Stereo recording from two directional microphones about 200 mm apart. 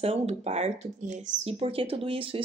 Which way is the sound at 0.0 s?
30° right (ahead or behind).